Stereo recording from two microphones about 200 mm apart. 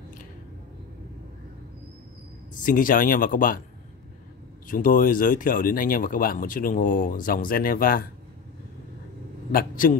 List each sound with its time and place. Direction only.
2.6 s speech: 45° left (ahead or behind)
4.6 s speech: 45° left (ahead or behind)
9.5 s a man's voice: 45° left (ahead or behind)